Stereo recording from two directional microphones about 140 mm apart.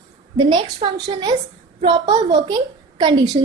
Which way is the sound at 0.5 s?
35° right (ahead or behind).